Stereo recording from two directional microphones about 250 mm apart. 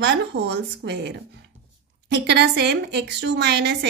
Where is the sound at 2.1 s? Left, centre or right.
Right.